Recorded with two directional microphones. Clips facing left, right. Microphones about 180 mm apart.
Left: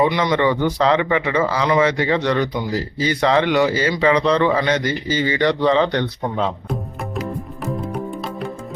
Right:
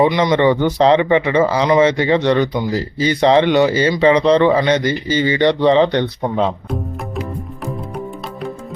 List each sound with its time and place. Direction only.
0.0 s speech: 20° right (ahead or behind)
7.6 s music: centre (ahead or behind)